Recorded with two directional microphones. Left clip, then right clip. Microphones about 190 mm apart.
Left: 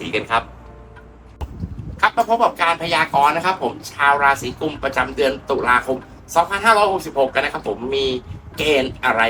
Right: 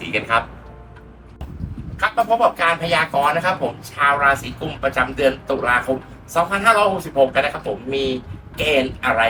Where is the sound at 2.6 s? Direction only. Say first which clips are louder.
Even; 15° left (ahead or behind).